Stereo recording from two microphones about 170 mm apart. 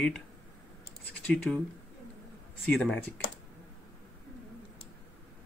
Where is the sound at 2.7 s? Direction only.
5° left (ahead or behind).